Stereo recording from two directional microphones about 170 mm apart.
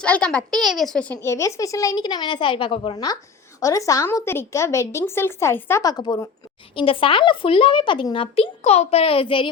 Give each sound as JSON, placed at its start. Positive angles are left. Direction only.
{"t": 0.0, "sound": "a woman's voice", "side_deg": 5}